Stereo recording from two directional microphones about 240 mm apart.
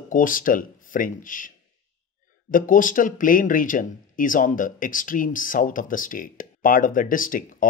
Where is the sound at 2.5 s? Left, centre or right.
Left.